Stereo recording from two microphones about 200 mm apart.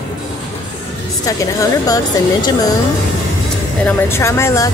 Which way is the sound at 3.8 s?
10° left (ahead or behind).